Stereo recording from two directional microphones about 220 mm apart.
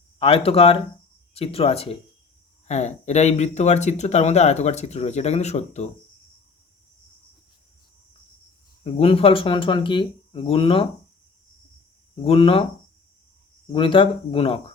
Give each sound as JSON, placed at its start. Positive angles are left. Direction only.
{"t": 0.2, "sound": "speech", "side_deg": 25}
{"t": 8.8, "sound": "speech", "side_deg": 25}
{"t": 12.1, "sound": "speech", "side_deg": 25}
{"t": 13.7, "sound": "speech", "side_deg": 25}